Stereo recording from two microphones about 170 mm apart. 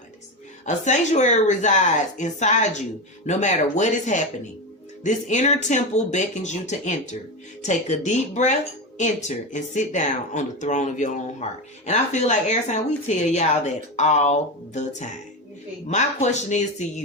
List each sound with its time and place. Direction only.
0.6 s speech: 45° left (ahead or behind)